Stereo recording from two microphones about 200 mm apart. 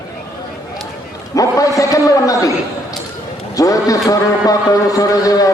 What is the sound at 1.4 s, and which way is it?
A man's voice, 15° left (ahead or behind).